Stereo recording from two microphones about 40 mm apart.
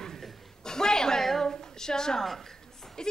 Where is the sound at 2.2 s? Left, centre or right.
Centre.